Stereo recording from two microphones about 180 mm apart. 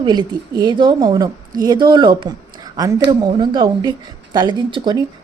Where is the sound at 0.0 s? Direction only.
25° right (ahead or behind).